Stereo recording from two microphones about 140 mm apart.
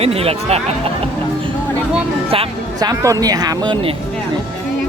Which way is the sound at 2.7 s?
25° right (ahead or behind).